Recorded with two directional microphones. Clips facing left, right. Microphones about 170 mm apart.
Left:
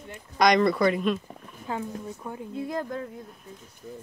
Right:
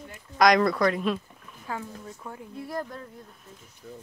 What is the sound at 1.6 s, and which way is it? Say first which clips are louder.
Speech: left 4 dB; 20° left (ahead or behind).